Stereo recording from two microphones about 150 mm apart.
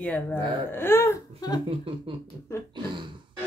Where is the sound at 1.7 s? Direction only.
35° right (ahead or behind).